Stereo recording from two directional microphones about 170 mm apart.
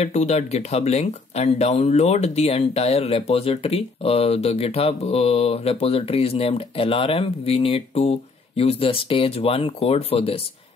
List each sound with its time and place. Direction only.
0.0 s speech: 40° left (ahead or behind)